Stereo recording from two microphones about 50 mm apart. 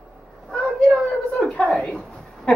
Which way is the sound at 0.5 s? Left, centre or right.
Centre.